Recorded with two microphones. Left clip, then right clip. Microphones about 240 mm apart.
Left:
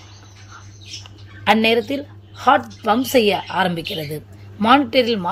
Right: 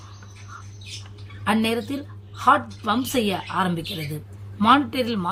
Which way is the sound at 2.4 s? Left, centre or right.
Centre.